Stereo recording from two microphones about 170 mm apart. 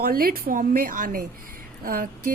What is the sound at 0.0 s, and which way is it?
A woman's voice, 60° right (ahead or behind).